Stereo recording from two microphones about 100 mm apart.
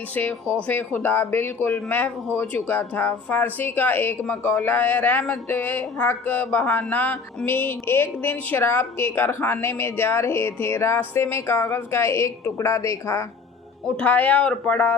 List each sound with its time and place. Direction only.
0.1 s speech: 15° left (ahead or behind)
13.8 s speech: 15° left (ahead or behind)